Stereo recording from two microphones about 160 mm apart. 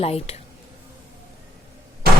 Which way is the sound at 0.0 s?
40° left (ahead or behind).